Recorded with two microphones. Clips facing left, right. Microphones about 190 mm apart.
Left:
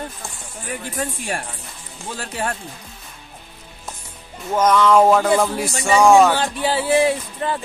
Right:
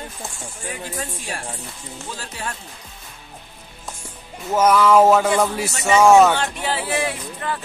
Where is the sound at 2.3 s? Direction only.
50° left (ahead or behind).